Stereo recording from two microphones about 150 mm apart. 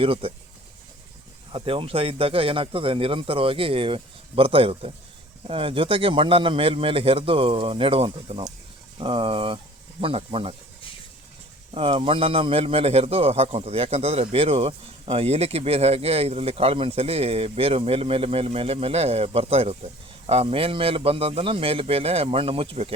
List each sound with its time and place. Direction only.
0.0 s a man's voice: 35° right (ahead or behind)
1.5 s a man's voice: 40° right (ahead or behind)
11.7 s a man's voice: 40° right (ahead or behind)